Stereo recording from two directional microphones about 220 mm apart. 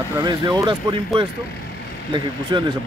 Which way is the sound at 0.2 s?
20° right (ahead or behind).